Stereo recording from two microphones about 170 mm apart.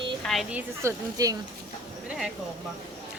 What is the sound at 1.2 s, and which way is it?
Speech, 20° right (ahead or behind).